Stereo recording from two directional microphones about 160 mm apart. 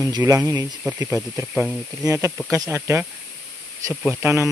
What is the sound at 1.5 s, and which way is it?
Speech, centre (ahead or behind).